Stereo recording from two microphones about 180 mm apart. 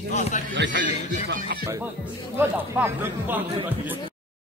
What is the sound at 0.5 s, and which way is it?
Speech, 80° right.